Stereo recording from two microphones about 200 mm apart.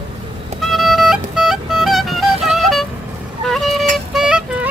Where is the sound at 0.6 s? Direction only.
Centre (ahead or behind).